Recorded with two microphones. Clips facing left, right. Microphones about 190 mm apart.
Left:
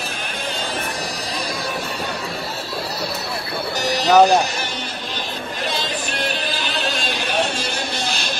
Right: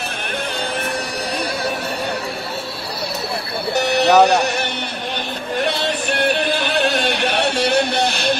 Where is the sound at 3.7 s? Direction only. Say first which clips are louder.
Right 1 dB; 65° right (ahead or behind).